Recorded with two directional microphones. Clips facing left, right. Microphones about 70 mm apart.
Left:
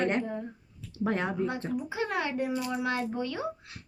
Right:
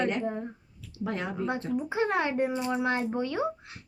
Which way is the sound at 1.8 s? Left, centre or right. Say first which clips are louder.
Right 6 dB; right.